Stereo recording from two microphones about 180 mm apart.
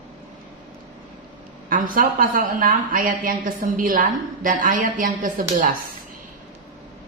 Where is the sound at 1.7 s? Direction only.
50° right (ahead or behind).